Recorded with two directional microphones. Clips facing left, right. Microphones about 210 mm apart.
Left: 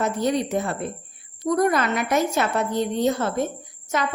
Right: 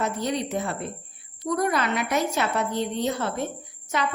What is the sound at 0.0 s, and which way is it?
A woman's voice, 50° left (ahead or behind).